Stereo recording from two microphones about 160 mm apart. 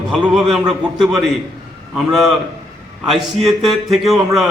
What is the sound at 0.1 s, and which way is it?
A man's voice, centre (ahead or behind).